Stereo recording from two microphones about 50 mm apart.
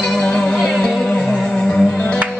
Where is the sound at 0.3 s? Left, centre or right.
Centre.